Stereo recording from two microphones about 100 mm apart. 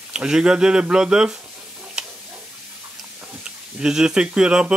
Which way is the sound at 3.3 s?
5° right (ahead or behind).